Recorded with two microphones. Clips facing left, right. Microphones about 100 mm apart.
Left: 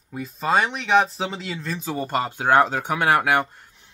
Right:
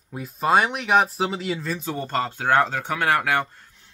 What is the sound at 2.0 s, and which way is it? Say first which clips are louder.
Speech: left 3 dB; 10° left (ahead or behind).